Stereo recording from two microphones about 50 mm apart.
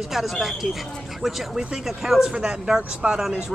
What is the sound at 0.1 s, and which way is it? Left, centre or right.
Speech, centre.